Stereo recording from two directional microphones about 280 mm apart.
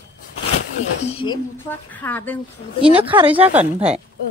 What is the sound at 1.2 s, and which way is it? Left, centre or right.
A woman's voice, centre.